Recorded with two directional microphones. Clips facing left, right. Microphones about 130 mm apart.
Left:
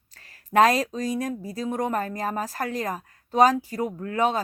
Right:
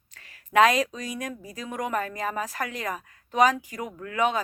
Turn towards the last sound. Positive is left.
turn(degrees=35)  # may be behind; listen again after turning